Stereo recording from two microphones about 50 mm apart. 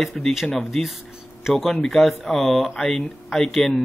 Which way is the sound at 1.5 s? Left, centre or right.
Centre.